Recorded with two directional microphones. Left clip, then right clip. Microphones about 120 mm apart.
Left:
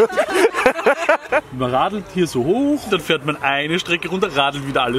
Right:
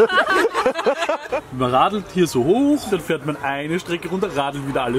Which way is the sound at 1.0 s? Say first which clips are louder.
Left 5 dB; 40° left (ahead or behind).